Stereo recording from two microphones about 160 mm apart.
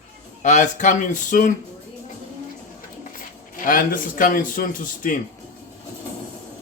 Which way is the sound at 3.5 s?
60° left (ahead or behind).